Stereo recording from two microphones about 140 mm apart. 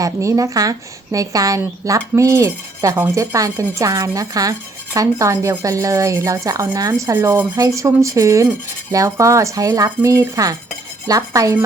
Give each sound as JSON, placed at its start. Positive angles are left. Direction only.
{"t": 0.0, "sound": "a woman's voice", "side_deg": -25}